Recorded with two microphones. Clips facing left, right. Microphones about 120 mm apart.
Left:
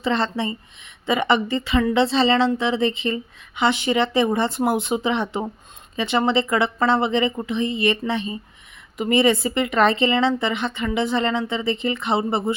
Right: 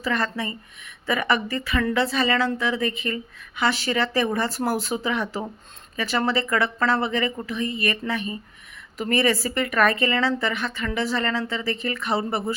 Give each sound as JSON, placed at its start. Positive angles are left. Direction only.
{"t": 0.0, "sound": "speech", "side_deg": 25}